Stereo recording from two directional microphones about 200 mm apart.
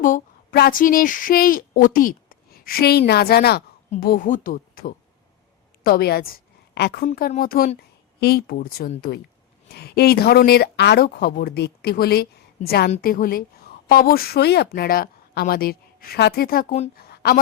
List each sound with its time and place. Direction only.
0.0 s a woman's voice: 45° left (ahead or behind)
7.1 s a woman's voice: 45° left (ahead or behind)
17.0 s a sound: 50° left (ahead or behind)